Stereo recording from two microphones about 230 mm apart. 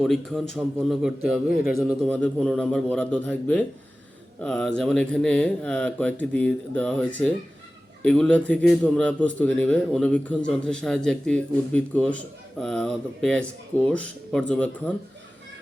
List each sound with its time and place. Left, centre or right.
0.0 s a man's voice: centre